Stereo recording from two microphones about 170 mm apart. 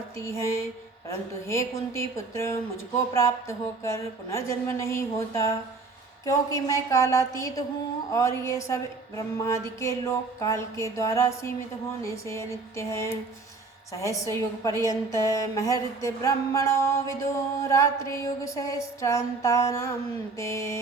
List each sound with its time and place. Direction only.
0.2 s music: 15° left (ahead or behind)
3.8 s music: 15° left (ahead or behind)
13.9 s a woman's voice: 20° left (ahead or behind)
20.4 s music: 15° left (ahead or behind)